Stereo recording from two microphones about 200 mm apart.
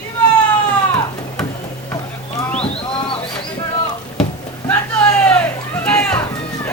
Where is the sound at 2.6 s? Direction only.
30° left (ahead or behind).